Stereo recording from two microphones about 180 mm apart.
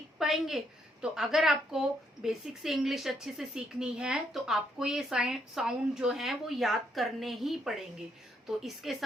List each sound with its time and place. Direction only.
0.2 s a woman's voice: centre (ahead or behind)